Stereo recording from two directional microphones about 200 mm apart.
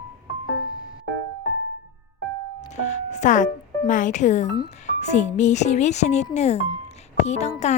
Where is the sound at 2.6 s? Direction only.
35° left (ahead or behind).